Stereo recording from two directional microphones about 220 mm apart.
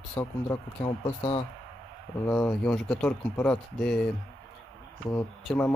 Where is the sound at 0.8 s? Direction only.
25° left (ahead or behind).